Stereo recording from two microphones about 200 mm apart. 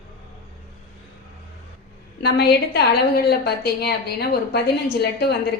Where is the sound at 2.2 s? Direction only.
55° left (ahead or behind).